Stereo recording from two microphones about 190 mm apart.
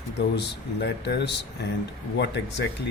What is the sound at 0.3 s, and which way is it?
A man's voice, 65° left (ahead or behind).